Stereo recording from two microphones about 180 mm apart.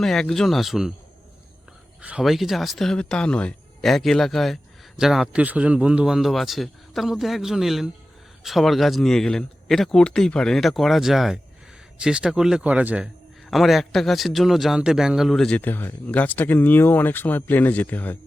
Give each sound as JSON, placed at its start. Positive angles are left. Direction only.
{"t": 0.0, "sound": "speech", "side_deg": 5}
{"t": 2.0, "sound": "a man's voice", "side_deg": -5}